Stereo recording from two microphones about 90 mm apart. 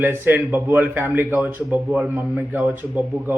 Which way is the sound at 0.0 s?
20° right (ahead or behind).